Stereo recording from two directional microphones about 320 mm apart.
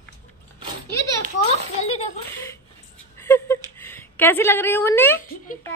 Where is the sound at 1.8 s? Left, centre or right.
Centre.